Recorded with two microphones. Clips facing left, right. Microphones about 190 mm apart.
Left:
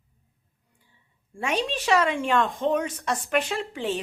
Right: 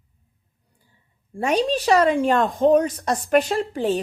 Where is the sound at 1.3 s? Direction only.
40° right (ahead or behind).